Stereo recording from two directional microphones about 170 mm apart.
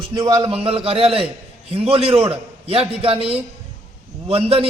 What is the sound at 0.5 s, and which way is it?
A man's voice, 35° right (ahead or behind).